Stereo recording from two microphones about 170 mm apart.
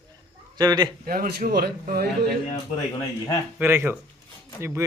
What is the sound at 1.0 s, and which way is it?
Speech, 60° right (ahead or behind).